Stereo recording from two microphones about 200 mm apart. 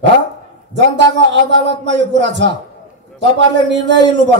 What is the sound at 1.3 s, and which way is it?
Speech, 60° right (ahead or behind).